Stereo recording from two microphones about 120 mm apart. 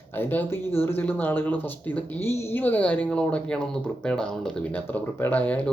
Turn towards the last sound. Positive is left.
turn(degrees=15)  # may be behind; listen again after turning